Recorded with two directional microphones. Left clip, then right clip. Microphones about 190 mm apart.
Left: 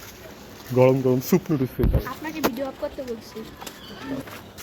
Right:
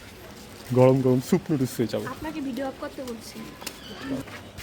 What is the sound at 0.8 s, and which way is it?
Speech, 20° right (ahead or behind).